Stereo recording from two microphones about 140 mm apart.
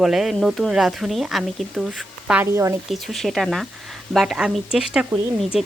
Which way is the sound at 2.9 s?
Centre (ahead or behind).